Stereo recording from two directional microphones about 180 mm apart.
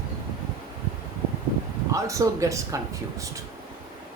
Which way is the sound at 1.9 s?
15° right (ahead or behind).